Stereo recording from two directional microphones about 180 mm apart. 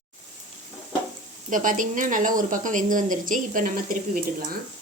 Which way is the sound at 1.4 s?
45° right (ahead or behind).